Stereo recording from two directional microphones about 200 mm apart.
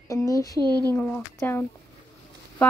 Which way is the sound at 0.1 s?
15° left (ahead or behind).